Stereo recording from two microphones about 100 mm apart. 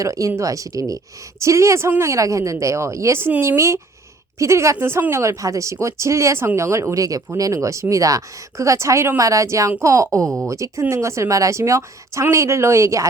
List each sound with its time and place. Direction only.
0.0 s a woman's voice: 30° right (ahead or behind)